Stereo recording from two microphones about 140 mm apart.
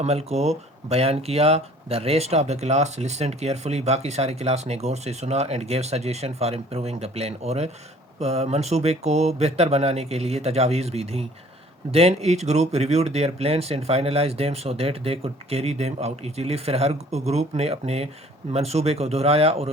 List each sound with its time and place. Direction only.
0.0 s speech: 50° right (ahead or behind)